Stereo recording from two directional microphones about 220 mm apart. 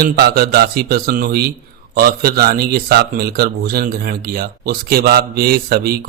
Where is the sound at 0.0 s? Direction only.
45° right (ahead or behind).